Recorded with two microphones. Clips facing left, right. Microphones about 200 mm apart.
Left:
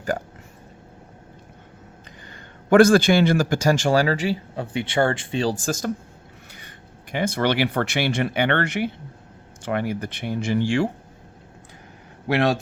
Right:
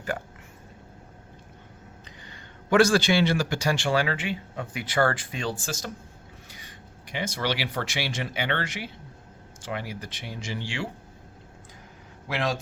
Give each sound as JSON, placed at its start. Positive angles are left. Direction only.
{"t": 2.2, "sound": "a man's voice", "side_deg": 50}
{"t": 5.5, "sound": "speech", "side_deg": 50}
{"t": 6.5, "sound": "speech", "side_deg": 60}
{"t": 12.3, "sound": "speech", "side_deg": 65}